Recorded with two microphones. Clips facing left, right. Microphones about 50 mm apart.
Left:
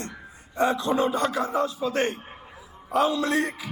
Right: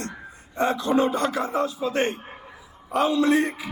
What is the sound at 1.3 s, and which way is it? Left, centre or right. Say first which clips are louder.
Speech: even; right.